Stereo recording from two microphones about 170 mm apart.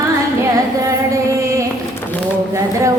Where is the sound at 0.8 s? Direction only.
20° right (ahead or behind).